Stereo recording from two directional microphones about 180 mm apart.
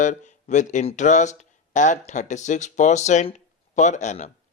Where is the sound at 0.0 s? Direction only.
45° left (ahead or behind).